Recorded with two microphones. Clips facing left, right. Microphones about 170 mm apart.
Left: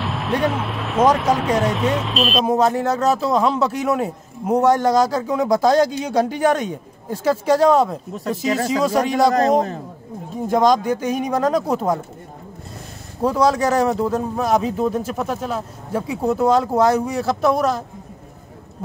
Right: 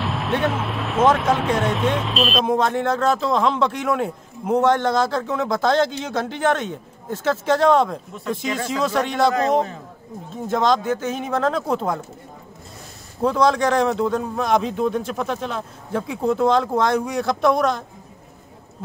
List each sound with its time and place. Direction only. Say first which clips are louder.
0.0 s speech: left 1 dB; centre (ahead or behind)
8.1 s a man's voice: left 4 dB; 40° left (ahead or behind)
10.3 s speech: left 3 dB; 10° left (ahead or behind)
13.2 s speech: left 1 dB; 10° left (ahead or behind)